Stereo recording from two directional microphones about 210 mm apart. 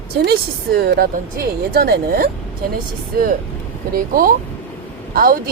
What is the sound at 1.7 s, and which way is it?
Speech, 45° right (ahead or behind).